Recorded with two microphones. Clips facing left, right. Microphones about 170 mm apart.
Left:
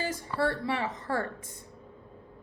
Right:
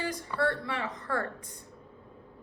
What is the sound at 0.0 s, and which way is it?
A woman's voice, 25° left (ahead or behind).